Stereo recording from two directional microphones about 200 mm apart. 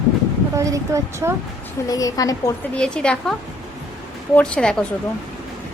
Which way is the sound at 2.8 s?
5° left (ahead or behind).